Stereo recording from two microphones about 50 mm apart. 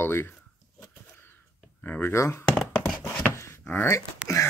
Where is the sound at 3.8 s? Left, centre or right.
Left.